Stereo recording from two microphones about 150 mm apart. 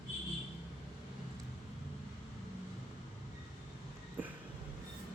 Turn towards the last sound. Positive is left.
turn(degrees=-10)  # may be behind; listen again after turning